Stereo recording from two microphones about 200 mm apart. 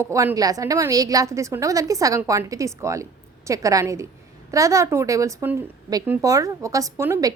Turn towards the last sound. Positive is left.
turn(degrees=-10)  # may be behind; listen again after turning